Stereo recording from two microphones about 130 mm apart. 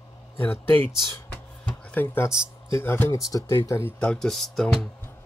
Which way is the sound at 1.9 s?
15° left (ahead or behind).